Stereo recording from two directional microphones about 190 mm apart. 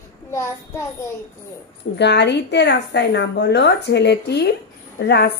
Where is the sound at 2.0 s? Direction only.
65° left (ahead or behind).